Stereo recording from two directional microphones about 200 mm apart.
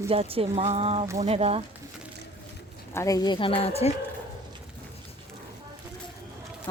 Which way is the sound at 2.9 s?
15° left (ahead or behind).